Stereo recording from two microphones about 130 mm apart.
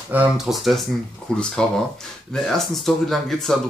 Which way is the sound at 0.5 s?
Centre (ahead or behind).